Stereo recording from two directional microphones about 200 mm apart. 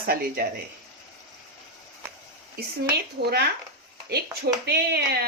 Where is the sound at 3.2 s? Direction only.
55° right (ahead or behind).